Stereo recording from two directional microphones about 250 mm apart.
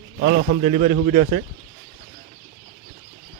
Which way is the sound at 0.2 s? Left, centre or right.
Right.